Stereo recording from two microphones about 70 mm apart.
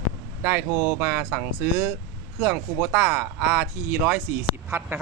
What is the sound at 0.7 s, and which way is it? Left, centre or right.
Speech, right.